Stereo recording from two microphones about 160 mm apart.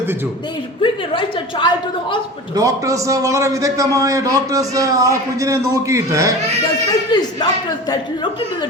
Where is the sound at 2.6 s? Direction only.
20° right (ahead or behind).